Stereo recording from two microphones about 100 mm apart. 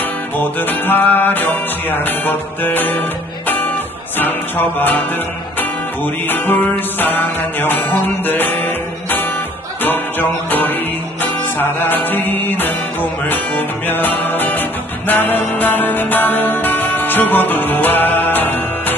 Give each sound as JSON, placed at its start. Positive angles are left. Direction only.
{"t": 0.4, "sound": "music", "side_deg": 20}
{"t": 3.4, "sound": "guitar", "side_deg": 20}
{"t": 4.2, "sound": "music", "side_deg": 20}
{"t": 6.2, "sound": "music", "side_deg": 20}